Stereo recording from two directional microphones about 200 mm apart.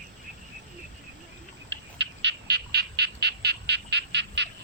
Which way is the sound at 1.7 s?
60° right (ahead or behind).